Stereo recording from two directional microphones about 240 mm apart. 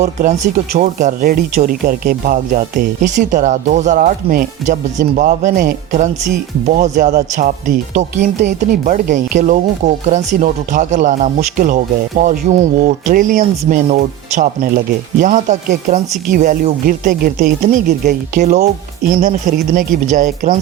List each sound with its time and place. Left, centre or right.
0.0 s speech: right